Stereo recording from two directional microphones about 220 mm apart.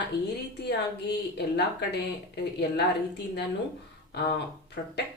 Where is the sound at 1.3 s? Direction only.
50° left (ahead or behind).